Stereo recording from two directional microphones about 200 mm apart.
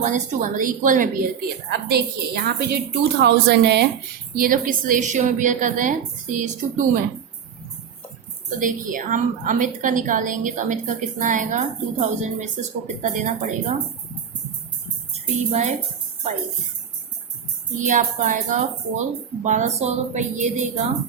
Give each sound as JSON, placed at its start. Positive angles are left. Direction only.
{"t": 0.0, "sound": "a woman's voice", "side_deg": -40}
{"t": 1.9, "sound": "a woman's voice", "side_deg": -55}
{"t": 4.4, "sound": "a woman's voice", "side_deg": -45}
{"t": 8.5, "sound": "a woman's voice", "side_deg": -40}
{"t": 15.1, "sound": "a woman's voice", "side_deg": -35}
{"t": 17.7, "sound": "a woman's voice", "side_deg": -40}